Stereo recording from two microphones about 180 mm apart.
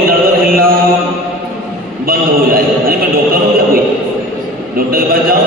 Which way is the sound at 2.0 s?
55° right (ahead or behind).